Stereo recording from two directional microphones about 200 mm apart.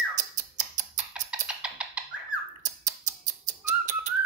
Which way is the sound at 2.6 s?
40° right (ahead or behind).